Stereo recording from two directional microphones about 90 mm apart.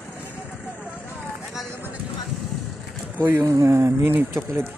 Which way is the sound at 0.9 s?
20° left (ahead or behind).